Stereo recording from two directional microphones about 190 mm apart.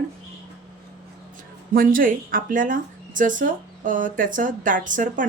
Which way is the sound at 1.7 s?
45° right (ahead or behind).